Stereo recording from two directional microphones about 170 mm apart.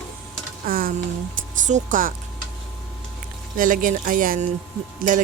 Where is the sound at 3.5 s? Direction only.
55° right (ahead or behind).